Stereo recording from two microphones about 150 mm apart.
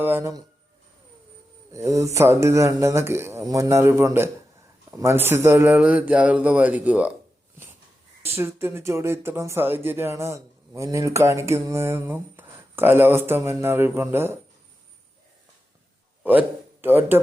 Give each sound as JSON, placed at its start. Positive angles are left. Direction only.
{"t": 0.0, "sound": "speech", "side_deg": -15}
{"t": 1.7, "sound": "speech", "side_deg": -20}
{"t": 8.2, "sound": "speech", "side_deg": -15}
{"t": 16.2, "sound": "a man's voice", "side_deg": -10}